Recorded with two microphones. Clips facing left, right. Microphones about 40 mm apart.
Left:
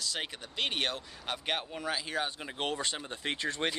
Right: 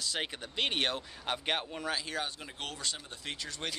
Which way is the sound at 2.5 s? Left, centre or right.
Left.